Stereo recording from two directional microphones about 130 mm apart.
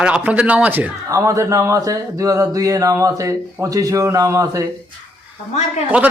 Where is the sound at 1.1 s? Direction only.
25° right (ahead or behind).